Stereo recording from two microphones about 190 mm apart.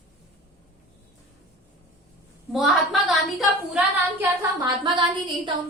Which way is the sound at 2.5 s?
Centre (ahead or behind).